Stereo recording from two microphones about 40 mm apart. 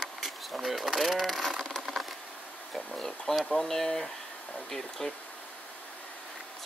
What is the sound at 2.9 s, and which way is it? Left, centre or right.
Speech, centre.